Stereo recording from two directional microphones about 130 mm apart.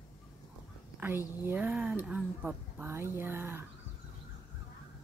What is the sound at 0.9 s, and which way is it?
Speech, 15° right (ahead or behind).